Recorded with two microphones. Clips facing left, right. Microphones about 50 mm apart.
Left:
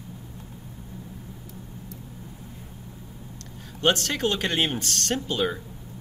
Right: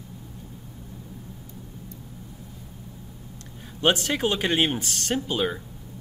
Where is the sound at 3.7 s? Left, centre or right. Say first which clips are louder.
Right 1 dB; centre.